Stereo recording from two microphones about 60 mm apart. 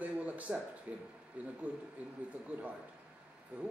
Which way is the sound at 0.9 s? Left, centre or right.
Right.